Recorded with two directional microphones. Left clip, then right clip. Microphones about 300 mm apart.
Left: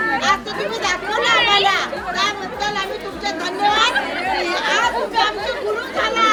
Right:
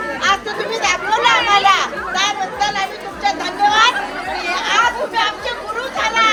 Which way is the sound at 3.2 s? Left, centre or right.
Centre.